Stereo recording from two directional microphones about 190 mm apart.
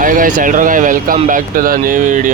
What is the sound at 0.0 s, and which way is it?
Speech, 45° right (ahead or behind).